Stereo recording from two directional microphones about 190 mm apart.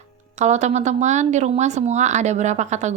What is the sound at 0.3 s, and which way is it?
Speech, 35° right (ahead or behind).